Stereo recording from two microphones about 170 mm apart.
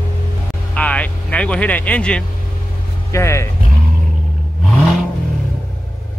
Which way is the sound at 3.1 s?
15° left (ahead or behind).